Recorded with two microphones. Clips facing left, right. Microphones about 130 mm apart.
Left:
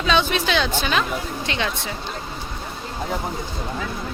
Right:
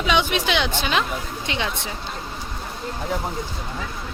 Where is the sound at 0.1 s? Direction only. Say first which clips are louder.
Left 1 dB; 15° right (ahead or behind).